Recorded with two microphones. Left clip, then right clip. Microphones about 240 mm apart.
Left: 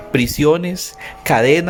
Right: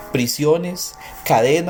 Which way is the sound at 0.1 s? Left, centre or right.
Left.